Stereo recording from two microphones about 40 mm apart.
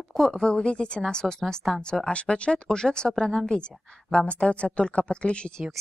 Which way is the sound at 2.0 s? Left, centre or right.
Left.